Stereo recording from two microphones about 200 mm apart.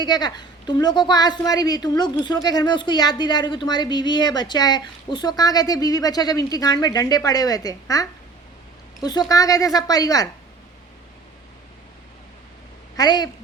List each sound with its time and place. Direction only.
0.0 s a woman's voice: 20° left (ahead or behind)
13.0 s a woman's voice: 20° left (ahead or behind)